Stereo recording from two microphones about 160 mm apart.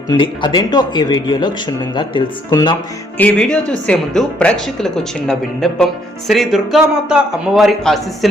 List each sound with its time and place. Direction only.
0.1 s speech: 30° left (ahead or behind)
3.2 s speech: 5° left (ahead or behind)